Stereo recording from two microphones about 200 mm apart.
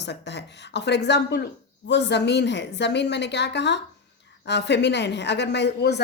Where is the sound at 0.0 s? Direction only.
60° left (ahead or behind).